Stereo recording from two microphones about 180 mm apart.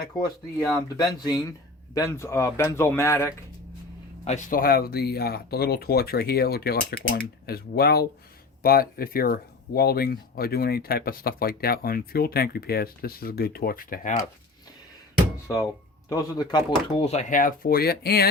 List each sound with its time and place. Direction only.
0.9 s speech: 20° left (ahead or behind)
4.3 s speech: 45° left (ahead or behind)
16.0 s speech: 20° left (ahead or behind)
17.1 s speech: 40° left (ahead or behind); by 18.3 s 60° left (ahead or behind)